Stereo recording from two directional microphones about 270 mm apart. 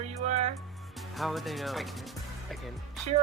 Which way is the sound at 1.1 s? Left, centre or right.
Centre.